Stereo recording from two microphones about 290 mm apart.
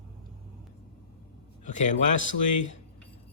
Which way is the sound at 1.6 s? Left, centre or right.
Left.